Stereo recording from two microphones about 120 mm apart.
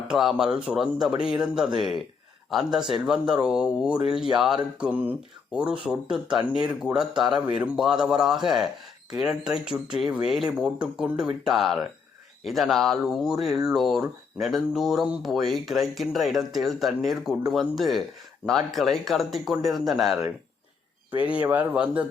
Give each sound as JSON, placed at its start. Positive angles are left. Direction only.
{"t": 0.1, "sound": "speech", "side_deg": -5}
{"t": 21.2, "sound": "speech", "side_deg": -15}